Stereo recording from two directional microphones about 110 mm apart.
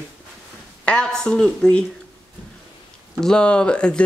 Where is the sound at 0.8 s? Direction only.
5° left (ahead or behind).